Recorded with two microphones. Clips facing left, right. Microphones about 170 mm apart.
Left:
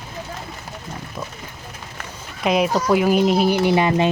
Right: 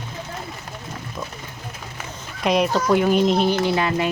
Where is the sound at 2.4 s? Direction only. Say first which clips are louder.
Left 1 dB; 5° left (ahead or behind).